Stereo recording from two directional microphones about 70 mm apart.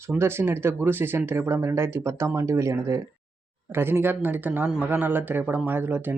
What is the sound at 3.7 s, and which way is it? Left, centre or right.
Speech, right.